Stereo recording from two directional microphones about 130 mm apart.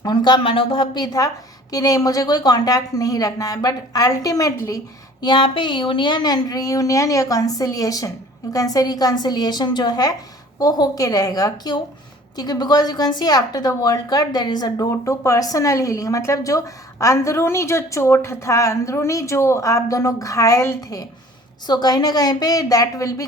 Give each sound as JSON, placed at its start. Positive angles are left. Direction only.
{"t": 0.0, "sound": "a woman's voice", "side_deg": 35}
{"t": 5.2, "sound": "a woman's voice", "side_deg": 40}